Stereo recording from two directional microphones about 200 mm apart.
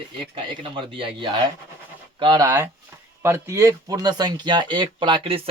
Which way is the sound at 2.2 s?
20° right (ahead or behind).